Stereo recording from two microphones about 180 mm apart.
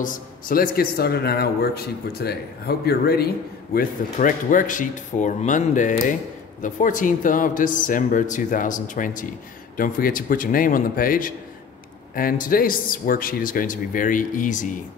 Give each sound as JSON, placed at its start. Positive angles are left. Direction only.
{"t": 0.0, "sound": "speech", "side_deg": 50}
{"t": 3.7, "sound": "a man's voice", "side_deg": 50}